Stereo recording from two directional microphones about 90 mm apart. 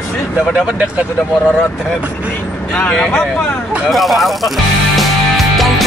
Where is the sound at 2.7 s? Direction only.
10° left (ahead or behind).